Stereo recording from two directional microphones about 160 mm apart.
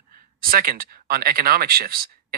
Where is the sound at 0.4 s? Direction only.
65° right (ahead or behind).